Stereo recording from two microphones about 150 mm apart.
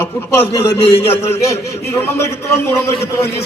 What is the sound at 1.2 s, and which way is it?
Speech, 20° left (ahead or behind).